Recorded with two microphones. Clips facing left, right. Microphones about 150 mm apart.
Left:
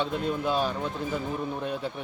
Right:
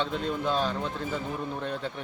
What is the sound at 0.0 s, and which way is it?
Speech, 10° left (ahead or behind).